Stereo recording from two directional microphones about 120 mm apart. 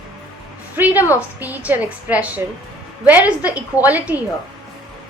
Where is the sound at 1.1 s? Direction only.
15° right (ahead or behind).